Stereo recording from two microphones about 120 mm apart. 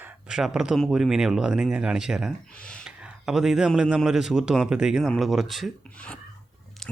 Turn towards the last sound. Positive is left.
turn(degrees=0)  # may be behind; listen again after turning